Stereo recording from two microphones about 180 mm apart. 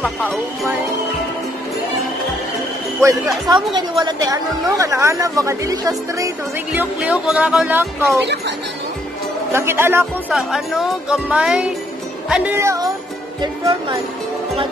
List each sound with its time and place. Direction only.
0.0 s speech: 5° left (ahead or behind)
3.4 s a woman's voice: 25° right (ahead or behind)
6.7 s a woman's voice: 10° right (ahead or behind)
9.5 s a woman's voice: 15° right (ahead or behind)
10.3 s a woman's voice: centre (ahead or behind); by 13.9 s 25° right (ahead or behind)